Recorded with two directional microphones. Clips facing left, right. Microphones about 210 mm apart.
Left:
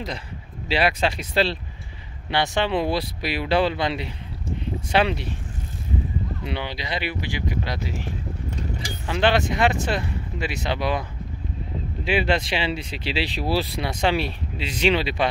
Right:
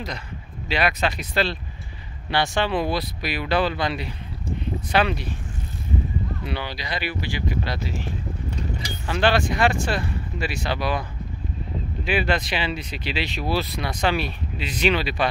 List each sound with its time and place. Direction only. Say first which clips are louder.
0.7 s speech: left 2 dB; 30° left (ahead or behind)
6.4 s speech: left 1 dB; 20° left (ahead or behind)
9.0 s speech: even; 20° left (ahead or behind)